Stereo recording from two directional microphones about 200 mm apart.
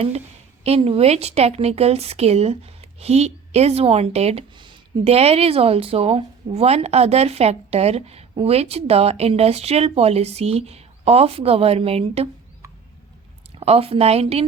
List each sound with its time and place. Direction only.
0.6 s a woman's voice: 30° right (ahead or behind)
13.6 s a woman's voice: 30° right (ahead or behind)